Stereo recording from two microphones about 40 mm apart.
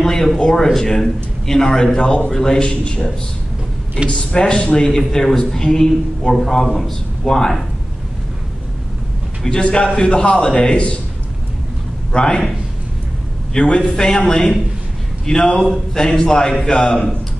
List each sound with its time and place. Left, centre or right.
0.0 s a man's voice: centre; by 3.1 s left
4.1 s a man's voice: left
4.8 s a man's voice: centre
9.4 s a man's voice: left
12.1 s a man's voice: left
13.5 s a man's voice: left
15.2 s a man's voice: centre